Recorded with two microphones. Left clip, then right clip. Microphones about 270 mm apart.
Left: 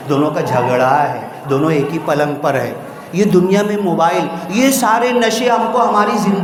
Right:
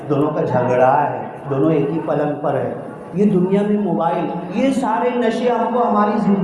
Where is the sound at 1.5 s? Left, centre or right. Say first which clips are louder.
Left 2 dB; left.